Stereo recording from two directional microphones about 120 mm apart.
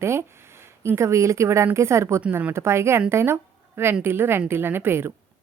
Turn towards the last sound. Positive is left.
turn(degrees=-20)  # may be behind; listen again after turning